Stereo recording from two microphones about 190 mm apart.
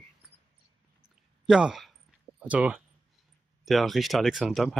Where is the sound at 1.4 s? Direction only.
5° right (ahead or behind).